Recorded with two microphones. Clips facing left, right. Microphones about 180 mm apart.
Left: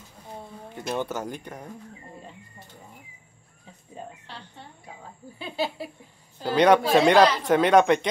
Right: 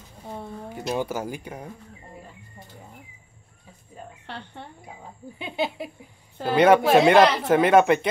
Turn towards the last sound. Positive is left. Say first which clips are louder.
# right 1 dB
turn(degrees=-5)  # may be behind; listen again after turning